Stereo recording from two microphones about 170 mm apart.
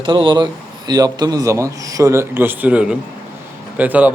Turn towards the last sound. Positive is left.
turn(degrees=-10)  # may be behind; listen again after turning